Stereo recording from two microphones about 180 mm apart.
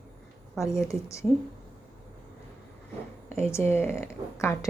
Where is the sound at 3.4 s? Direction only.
15° left (ahead or behind).